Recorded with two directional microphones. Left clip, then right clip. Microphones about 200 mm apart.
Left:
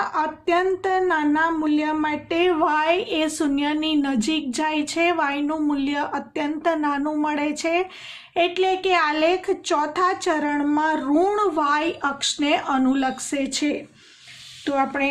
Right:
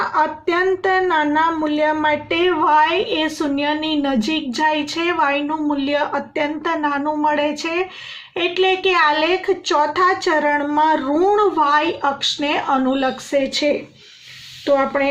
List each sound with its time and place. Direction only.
0.0 s speech: 45° left (ahead or behind)